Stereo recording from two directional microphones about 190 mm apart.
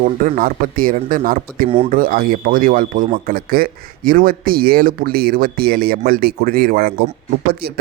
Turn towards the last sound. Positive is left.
turn(degrees=-55)  # may be behind; listen again after turning